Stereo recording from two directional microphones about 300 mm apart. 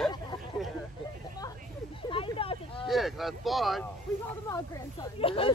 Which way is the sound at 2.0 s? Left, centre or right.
Centre.